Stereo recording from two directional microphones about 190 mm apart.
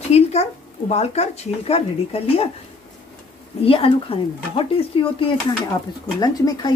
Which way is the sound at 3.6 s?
30° left (ahead or behind).